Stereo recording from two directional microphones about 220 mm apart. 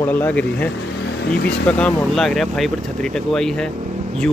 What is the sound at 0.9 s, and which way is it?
Vehicle, 50° left (ahead or behind).